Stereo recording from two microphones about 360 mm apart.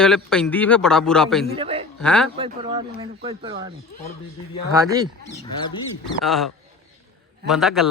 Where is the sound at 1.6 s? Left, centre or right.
Centre.